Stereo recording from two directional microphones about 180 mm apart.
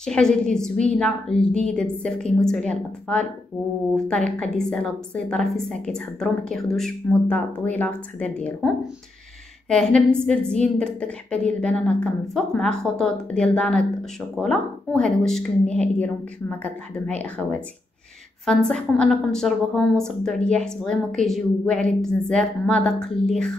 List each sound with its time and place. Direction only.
0.0 s a woman's voice: 5° left (ahead or behind)
9.7 s a woman's voice: 5° left (ahead or behind)